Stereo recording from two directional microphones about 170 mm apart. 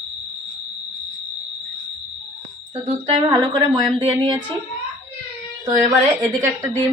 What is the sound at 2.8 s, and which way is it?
Speech, 35° right (ahead or behind).